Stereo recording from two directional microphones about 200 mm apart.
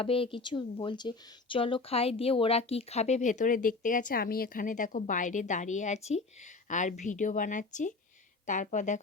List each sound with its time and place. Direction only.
0.0 s speech: 25° left (ahead or behind)